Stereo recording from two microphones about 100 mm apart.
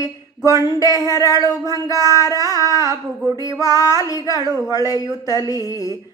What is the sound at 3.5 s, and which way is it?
Speech, 35° left (ahead or behind).